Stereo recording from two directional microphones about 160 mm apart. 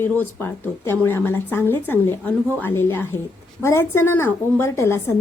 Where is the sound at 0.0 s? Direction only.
15° left (ahead or behind).